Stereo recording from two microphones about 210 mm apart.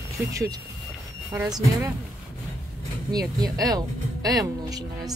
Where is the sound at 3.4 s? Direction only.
15° right (ahead or behind).